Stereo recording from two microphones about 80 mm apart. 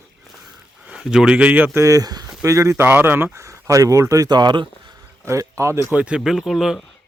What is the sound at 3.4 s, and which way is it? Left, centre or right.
Speech, right.